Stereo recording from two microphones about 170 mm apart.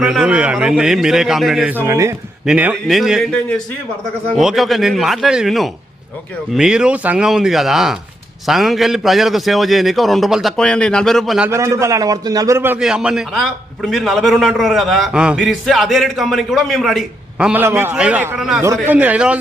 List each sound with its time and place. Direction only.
0.0 s a man's voice: 5° right (ahead or behind)
11.4 s a man's voice: 15° right (ahead or behind)
18.6 s a man's voice: 15° right (ahead or behind)